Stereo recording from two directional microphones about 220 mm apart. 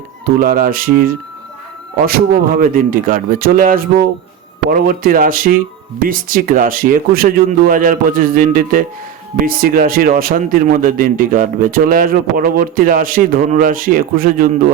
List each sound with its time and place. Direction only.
0.3 s a man's voice: 40° right (ahead or behind)